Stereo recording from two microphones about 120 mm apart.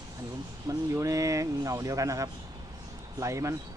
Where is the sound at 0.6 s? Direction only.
25° right (ahead or behind).